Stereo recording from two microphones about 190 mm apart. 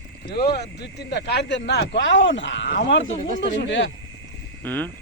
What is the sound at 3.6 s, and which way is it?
Speech, 70° left (ahead or behind).